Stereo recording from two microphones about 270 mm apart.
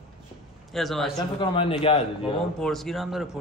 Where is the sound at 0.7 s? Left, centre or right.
Centre.